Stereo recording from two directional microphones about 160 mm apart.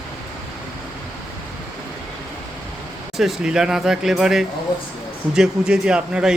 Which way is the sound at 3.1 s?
Centre (ahead or behind).